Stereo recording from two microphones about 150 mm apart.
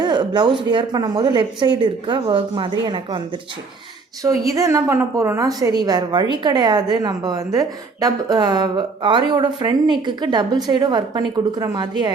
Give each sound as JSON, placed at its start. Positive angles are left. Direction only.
{"t": 0.0, "sound": "a woman's voice", "side_deg": -30}
{"t": 4.2, "sound": "a woman's voice", "side_deg": -20}